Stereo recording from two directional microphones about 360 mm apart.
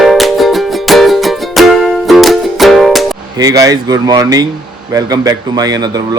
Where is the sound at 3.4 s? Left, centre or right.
Centre.